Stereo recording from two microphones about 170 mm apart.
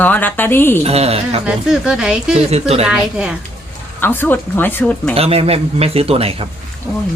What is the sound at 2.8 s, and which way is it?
Speech, 5° right (ahead or behind).